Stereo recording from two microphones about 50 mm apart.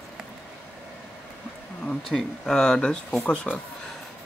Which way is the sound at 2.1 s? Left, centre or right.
Centre.